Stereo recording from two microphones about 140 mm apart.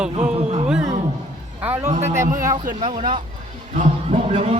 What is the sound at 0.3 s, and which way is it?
Music, 50° right (ahead or behind).